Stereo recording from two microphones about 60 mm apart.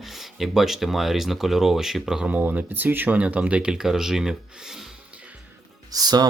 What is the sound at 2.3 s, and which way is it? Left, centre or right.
Speech, right.